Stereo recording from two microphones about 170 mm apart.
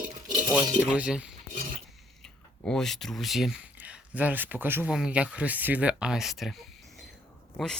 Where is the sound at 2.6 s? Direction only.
5° left (ahead or behind).